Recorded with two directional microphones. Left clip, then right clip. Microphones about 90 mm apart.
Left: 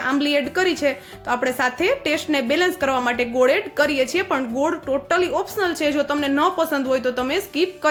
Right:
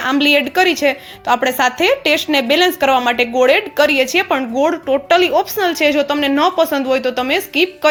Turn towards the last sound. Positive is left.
turn(degrees=-15)  # may be behind; listen again after turning